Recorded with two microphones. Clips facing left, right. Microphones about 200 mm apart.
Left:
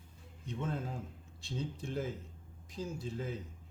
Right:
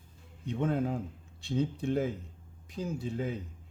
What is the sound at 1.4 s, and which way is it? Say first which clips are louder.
Speech: right 9 dB; 60° right (ahead or behind).